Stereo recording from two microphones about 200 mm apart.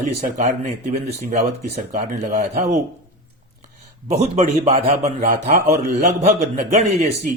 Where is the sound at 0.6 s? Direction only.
40° right (ahead or behind).